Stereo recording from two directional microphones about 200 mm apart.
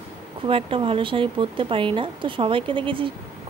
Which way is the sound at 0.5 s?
25° right (ahead or behind).